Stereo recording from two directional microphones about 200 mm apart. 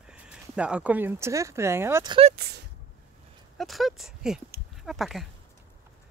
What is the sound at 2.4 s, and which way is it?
Speech, 55° right (ahead or behind).